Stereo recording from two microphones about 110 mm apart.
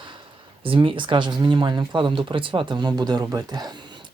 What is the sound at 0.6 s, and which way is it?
Speech, 50° right (ahead or behind).